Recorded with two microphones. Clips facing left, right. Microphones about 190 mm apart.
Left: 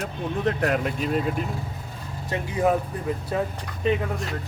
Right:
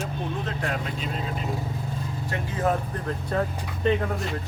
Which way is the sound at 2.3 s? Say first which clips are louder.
Left 4 dB; 15° left (ahead or behind).